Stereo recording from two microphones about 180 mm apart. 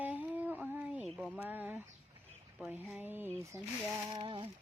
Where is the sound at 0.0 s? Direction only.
10° right (ahead or behind).